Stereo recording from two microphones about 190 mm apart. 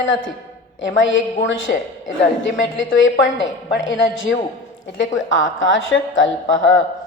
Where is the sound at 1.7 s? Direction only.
55° left (ahead or behind).